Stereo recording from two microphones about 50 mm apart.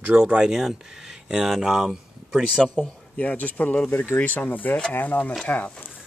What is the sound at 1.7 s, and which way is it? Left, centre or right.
Speech, centre.